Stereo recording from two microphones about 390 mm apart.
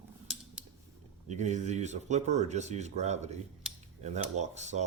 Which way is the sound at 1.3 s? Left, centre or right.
Centre.